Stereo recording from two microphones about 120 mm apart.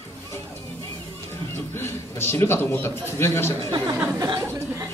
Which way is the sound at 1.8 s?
20° left (ahead or behind).